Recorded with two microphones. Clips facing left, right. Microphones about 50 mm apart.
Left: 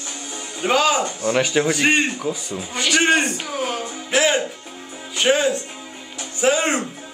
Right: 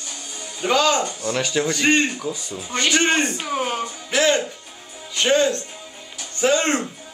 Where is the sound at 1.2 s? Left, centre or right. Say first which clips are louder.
Left 4 dB; left.